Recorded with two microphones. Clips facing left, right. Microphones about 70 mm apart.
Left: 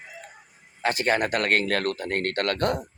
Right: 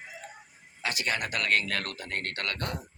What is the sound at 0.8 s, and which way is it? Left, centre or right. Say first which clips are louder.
Speech: left 8 dB; left.